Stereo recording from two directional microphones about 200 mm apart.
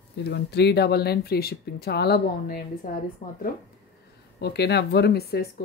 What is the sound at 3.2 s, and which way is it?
Speech, 25° left (ahead or behind).